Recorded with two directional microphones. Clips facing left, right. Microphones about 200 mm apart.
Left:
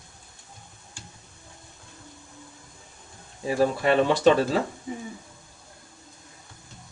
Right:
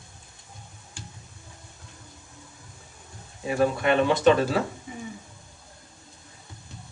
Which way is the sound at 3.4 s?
35° left (ahead or behind).